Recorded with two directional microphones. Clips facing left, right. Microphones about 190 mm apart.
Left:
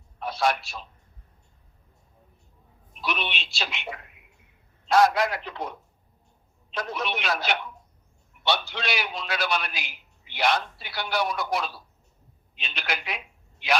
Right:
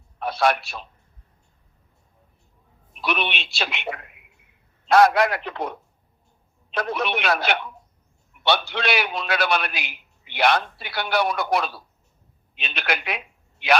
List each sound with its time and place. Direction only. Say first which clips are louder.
0.2 s a man's voice: right 4 dB; 65° right (ahead or behind)
3.0 s a man's voice: right 5 dB; 65° right (ahead or behind)